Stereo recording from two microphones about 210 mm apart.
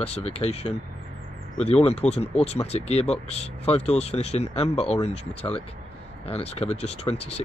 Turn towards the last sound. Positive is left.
turn(degrees=30)  # may be behind; listen again after turning